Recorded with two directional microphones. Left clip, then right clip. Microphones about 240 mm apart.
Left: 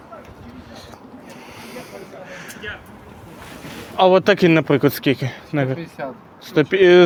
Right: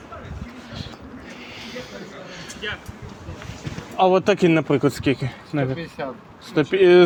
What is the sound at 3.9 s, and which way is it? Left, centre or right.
Speech, centre.